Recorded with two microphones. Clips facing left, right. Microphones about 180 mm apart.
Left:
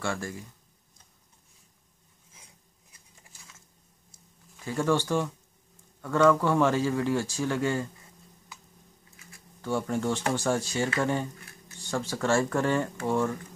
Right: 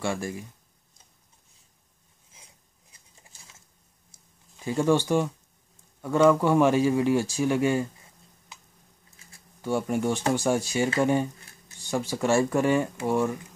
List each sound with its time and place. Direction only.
0.0 s speech: 15° right (ahead or behind)
3.3 s typing: 25° right (ahead or behind)
4.6 s speech: 20° right (ahead or behind)
9.6 s speech: 15° right (ahead or behind)